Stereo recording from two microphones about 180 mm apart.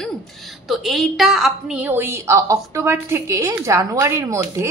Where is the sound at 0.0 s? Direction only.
Centre (ahead or behind).